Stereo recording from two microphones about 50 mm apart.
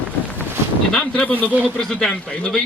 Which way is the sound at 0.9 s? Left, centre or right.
Centre.